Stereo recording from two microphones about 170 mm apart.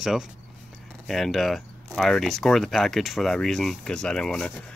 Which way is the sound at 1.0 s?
Centre (ahead or behind).